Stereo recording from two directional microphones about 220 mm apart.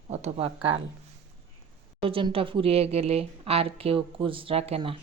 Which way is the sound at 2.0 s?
25° right (ahead or behind).